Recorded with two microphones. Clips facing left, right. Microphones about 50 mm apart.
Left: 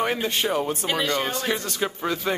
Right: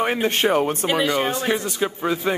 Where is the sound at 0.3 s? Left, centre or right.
Right.